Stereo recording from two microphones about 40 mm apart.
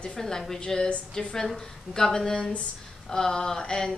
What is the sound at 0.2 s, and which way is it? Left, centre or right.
A woman's voice, centre.